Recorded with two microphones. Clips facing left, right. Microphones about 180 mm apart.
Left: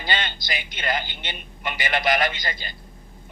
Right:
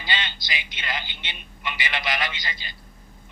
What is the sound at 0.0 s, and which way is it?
Speech, 50° left (ahead or behind).